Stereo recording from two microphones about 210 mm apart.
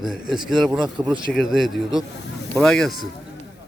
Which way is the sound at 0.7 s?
20° right (ahead or behind).